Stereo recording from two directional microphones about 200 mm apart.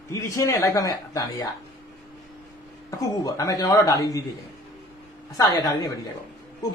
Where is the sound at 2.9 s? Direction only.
15° left (ahead or behind).